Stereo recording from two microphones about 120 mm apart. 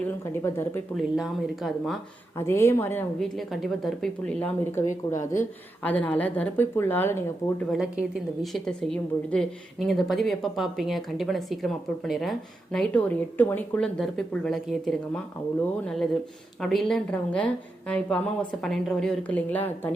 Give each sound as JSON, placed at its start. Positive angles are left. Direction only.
{"t": 0.4, "sound": "speech", "side_deg": 20}
{"t": 0.9, "sound": "a woman's voice", "side_deg": 0}
{"t": 2.4, "sound": "speech", "side_deg": 25}
{"t": 3.2, "sound": "a woman's voice", "side_deg": 0}
{"t": 4.4, "sound": "speech", "side_deg": 20}
{"t": 4.9, "sound": "speech", "side_deg": 90}
{"t": 5.8, "sound": "speech", "side_deg": 10}
{"t": 7.7, "sound": "a woman's voice", "side_deg": -5}
{"t": 16.6, "sound": "speech", "side_deg": 0}